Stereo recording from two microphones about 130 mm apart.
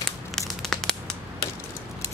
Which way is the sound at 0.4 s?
5° left (ahead or behind).